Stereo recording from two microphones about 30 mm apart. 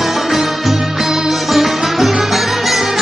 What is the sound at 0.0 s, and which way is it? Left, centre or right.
Music, centre.